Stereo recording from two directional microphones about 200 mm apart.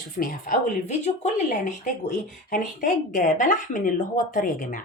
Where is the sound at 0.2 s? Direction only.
45° left (ahead or behind).